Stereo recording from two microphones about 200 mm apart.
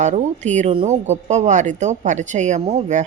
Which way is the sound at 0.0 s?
35° right (ahead or behind).